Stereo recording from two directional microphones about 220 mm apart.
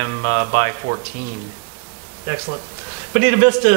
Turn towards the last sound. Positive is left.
turn(degrees=-15)  # may be behind; listen again after turning